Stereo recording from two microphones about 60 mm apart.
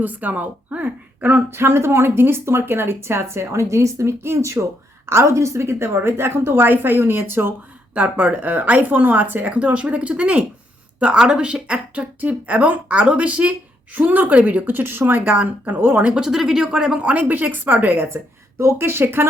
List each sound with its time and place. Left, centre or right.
0.0 s a woman's voice: right
7.9 s speech: right
16.1 s speech: centre
17.0 s a woman's voice: right